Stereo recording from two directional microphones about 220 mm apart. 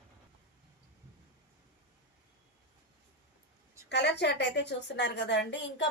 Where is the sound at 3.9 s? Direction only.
50° left (ahead or behind).